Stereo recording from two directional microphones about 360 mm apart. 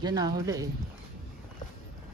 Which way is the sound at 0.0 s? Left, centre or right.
Centre.